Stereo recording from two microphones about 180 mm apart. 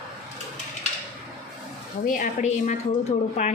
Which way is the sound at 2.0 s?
45° left (ahead or behind).